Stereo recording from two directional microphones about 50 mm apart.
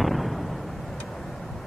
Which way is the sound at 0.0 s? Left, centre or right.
Centre.